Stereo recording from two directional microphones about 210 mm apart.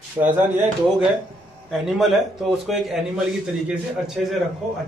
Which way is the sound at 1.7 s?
Centre (ahead or behind).